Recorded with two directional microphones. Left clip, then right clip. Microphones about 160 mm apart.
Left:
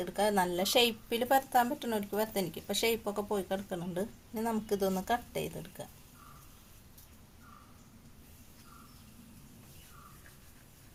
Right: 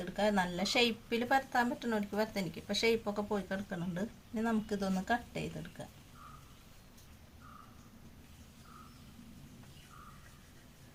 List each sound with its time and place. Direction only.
0.0 s a woman's voice: 35° left (ahead or behind)